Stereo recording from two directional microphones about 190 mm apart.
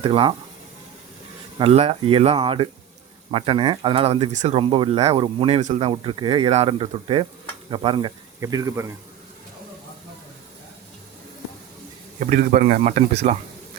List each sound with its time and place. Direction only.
0.0 s speech: 30° right (ahead or behind)
1.5 s speech: 30° right (ahead or behind); by 8.9 s 15° right (ahead or behind)
12.2 s speech: 40° right (ahead or behind)